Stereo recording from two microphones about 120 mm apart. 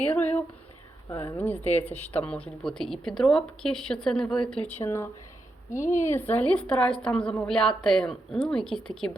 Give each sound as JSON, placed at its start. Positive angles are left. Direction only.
{"t": 0.0, "sound": "a sound", "side_deg": 10}
{"t": 1.1, "sound": "a woman's voice", "side_deg": 15}
{"t": 4.8, "sound": "speech", "side_deg": 20}
{"t": 5.7, "sound": "speech", "side_deg": 90}
{"t": 6.1, "sound": "a woman's voice", "side_deg": 15}